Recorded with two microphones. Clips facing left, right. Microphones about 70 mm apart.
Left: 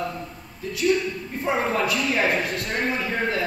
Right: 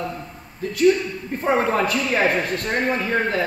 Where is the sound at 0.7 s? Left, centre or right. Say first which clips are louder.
Right 5 dB; right.